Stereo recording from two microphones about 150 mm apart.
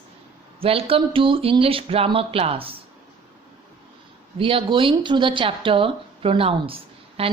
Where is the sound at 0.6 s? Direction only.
40° right (ahead or behind).